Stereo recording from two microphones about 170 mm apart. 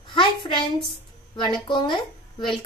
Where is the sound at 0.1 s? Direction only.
30° left (ahead or behind).